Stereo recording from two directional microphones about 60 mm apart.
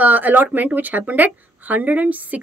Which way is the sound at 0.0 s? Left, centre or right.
Right.